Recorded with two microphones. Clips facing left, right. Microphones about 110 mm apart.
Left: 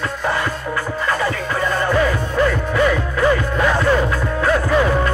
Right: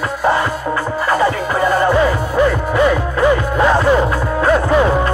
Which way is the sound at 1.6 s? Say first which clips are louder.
Right 5 dB; 20° right (ahead or behind).